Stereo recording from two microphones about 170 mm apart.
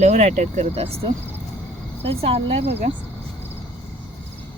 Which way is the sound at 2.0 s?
35° right (ahead or behind).